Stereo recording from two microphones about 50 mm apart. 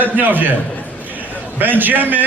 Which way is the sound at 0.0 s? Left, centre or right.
Right.